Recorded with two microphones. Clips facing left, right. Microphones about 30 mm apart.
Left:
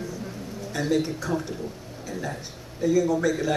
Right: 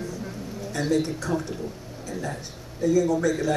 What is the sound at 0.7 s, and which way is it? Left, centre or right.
Speech, centre.